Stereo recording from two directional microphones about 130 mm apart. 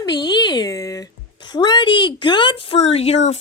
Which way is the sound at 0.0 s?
30° left (ahead or behind).